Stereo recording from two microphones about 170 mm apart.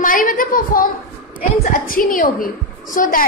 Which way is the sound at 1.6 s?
55° left (ahead or behind).